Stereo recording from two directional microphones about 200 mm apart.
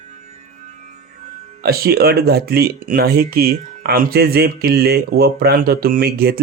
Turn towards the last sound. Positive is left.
turn(degrees=-50)  # may be behind; listen again after turning